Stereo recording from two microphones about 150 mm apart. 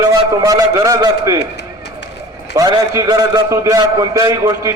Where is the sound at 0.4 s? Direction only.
20° right (ahead or behind).